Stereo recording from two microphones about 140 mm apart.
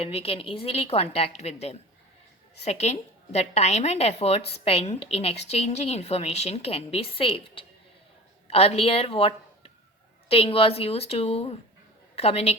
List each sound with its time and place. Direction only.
0.0 s a woman's voice: 45° left (ahead or behind)